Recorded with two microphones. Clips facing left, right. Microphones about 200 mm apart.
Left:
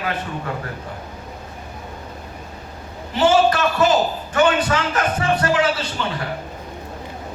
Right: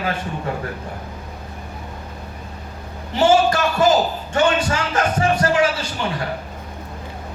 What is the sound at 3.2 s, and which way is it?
A man's voice, 25° right (ahead or behind).